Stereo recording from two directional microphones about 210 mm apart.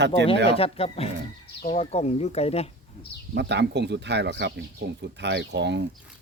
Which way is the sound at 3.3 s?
55° right (ahead or behind).